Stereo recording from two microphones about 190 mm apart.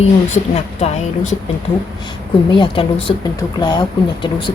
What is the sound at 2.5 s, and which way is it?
Speech, 25° left (ahead or behind).